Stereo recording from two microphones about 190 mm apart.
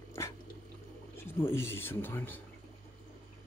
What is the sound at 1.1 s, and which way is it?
Speech, 15° left (ahead or behind).